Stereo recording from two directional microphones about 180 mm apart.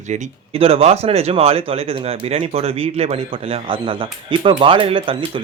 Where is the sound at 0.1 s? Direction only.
35° right (ahead or behind).